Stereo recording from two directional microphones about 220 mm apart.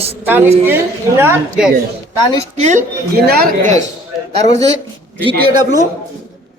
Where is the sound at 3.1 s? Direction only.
45° right (ahead or behind).